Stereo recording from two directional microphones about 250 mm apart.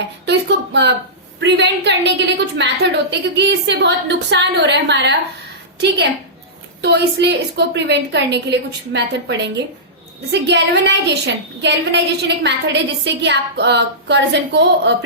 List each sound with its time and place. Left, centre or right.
0.3 s a woman's voice: right
6.8 s a woman's voice: right